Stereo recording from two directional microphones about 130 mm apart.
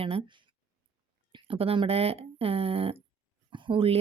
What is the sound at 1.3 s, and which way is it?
Speech, 45° right (ahead or behind).